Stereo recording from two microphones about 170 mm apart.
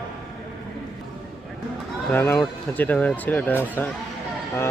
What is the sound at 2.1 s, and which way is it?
Speech, 10° left (ahead or behind).